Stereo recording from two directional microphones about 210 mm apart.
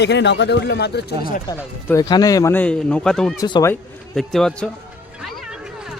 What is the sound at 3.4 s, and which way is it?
Speech, 15° left (ahead or behind).